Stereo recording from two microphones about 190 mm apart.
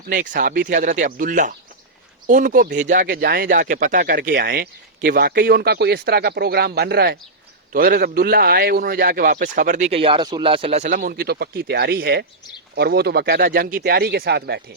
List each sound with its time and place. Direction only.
0.3 s speech: 50° right (ahead or behind)
10.9 s speech: 55° right (ahead or behind)